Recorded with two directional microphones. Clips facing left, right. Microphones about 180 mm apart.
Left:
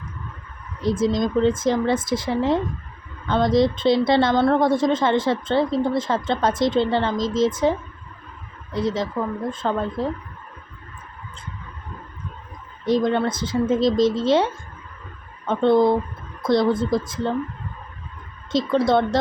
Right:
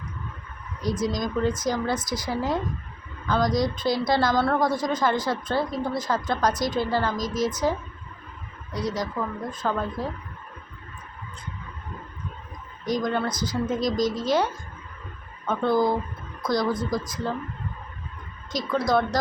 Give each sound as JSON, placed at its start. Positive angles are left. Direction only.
{"t": 0.8, "sound": "a woman's voice", "side_deg": 25}
{"t": 12.8, "sound": "a woman's voice", "side_deg": 25}
{"t": 18.5, "sound": "a woman's voice", "side_deg": 25}